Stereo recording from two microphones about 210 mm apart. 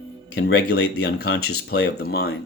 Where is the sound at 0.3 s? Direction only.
50° left (ahead or behind).